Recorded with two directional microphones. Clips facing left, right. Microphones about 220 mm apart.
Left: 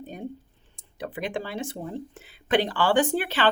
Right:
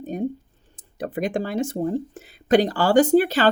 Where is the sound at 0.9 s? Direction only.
45° right (ahead or behind).